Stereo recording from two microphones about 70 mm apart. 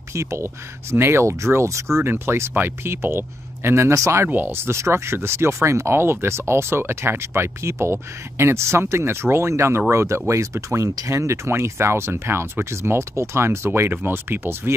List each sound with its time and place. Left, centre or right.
0.1 s speech: right
4.3 s speech: right